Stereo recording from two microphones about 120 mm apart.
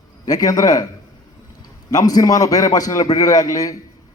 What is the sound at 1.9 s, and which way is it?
A man's voice, 30° left (ahead or behind).